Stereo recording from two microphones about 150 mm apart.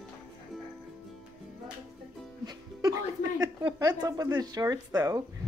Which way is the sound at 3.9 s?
25° right (ahead or behind).